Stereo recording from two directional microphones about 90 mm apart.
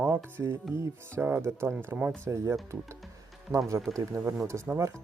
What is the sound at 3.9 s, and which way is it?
Speech, 35° right (ahead or behind).